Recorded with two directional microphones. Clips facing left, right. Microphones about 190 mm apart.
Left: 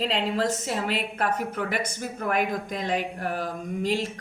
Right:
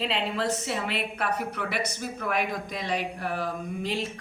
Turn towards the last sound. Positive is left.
turn(degrees=40)  # may be behind; listen again after turning